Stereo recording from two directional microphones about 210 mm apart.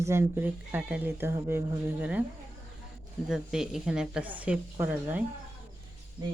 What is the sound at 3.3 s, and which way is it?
Speech, 5° right (ahead or behind).